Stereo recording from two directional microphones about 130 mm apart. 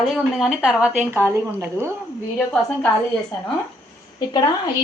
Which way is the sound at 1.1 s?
20° right (ahead or behind).